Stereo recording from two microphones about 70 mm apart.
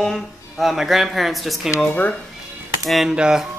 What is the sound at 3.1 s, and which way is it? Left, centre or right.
Music, centre.